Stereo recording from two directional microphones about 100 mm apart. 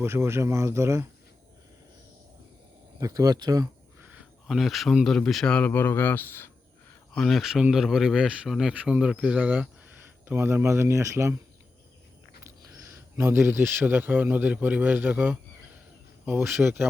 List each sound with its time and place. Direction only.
0.0 s speech: 25° right (ahead or behind)
3.0 s speech: 40° right (ahead or behind)
4.0 s a sound: 15° right (ahead or behind)
4.4 s speech: centre (ahead or behind); by 6.5 s 20° left (ahead or behind)
7.1 s speech: 5° left (ahead or behind); by 11.3 s 30° right (ahead or behind)
12.4 s a man's voice: 25° right (ahead or behind)